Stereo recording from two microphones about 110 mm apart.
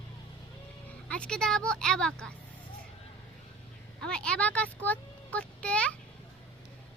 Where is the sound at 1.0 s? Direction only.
10° left (ahead or behind).